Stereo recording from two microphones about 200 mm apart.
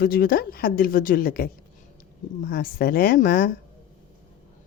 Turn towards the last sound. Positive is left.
turn(degrees=45)  # may be behind; listen again after turning